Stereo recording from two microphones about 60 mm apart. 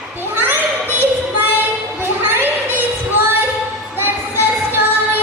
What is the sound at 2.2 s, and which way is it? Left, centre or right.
Crowd, right.